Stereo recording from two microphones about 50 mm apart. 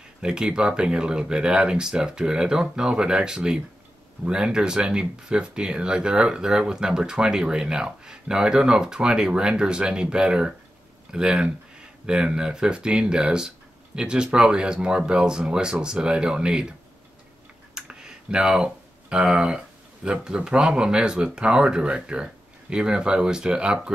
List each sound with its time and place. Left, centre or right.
0.2 s speech: centre
17.7 s speech: centre